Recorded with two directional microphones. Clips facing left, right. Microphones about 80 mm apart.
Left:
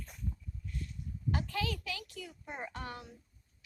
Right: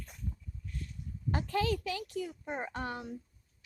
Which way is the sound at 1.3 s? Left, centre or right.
Right.